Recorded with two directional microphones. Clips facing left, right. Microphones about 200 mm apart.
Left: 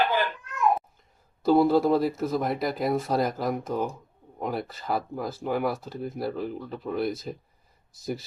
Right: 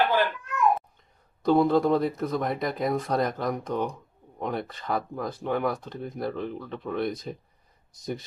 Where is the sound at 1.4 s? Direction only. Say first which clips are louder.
Left 1 dB; 5° left (ahead or behind).